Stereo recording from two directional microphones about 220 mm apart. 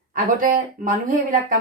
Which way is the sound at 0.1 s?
40° right (ahead or behind).